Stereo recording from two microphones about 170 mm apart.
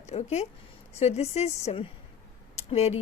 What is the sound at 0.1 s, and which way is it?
Speech, 40° left (ahead or behind).